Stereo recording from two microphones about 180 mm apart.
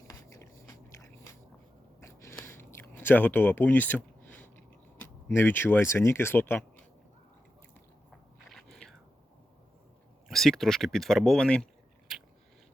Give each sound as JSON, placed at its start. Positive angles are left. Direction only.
{"t": 0.1, "sound": "biting", "side_deg": 15}
{"t": 2.0, "sound": "a sound", "side_deg": 15}
{"t": 4.9, "sound": "speech", "side_deg": 10}
{"t": 8.5, "sound": "biting", "side_deg": 0}
{"t": 10.2, "sound": "speech", "side_deg": 0}